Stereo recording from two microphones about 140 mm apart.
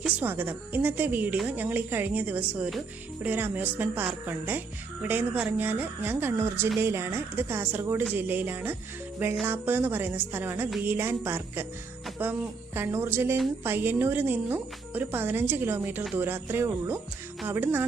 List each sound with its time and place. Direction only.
0.2 s speech: 15° right (ahead or behind)